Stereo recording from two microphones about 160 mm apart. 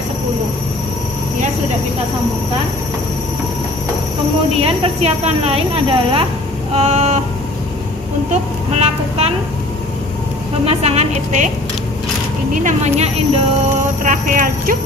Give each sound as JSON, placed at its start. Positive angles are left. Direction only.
{"t": 4.6, "sound": "a woman's voice", "side_deg": -40}
{"t": 8.3, "sound": "speech", "side_deg": -45}
{"t": 10.6, "sound": "a woman's voice", "side_deg": -40}
{"t": 12.6, "sound": "speech", "side_deg": -45}
{"t": 14.0, "sound": "speech", "side_deg": -55}